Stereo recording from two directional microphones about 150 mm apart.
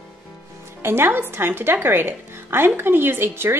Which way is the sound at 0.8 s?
15° right (ahead or behind).